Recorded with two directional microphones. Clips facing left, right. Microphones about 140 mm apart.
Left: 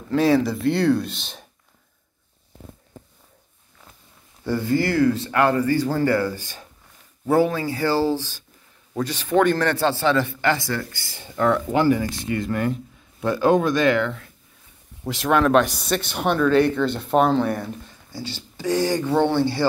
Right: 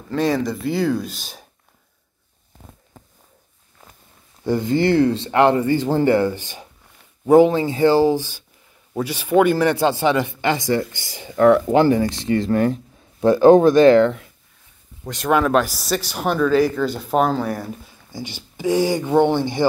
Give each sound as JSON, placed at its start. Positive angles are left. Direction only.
{"t": 0.1, "sound": "speech", "side_deg": 0}
{"t": 4.5, "sound": "speech", "side_deg": -20}
{"t": 15.0, "sound": "speech", "side_deg": 0}
{"t": 18.1, "sound": "speech", "side_deg": -15}